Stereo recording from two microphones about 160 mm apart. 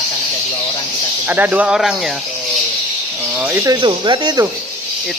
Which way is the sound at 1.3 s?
10° right (ahead or behind).